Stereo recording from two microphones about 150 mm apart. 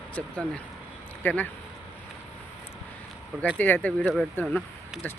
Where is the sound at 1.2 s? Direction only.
10° left (ahead or behind).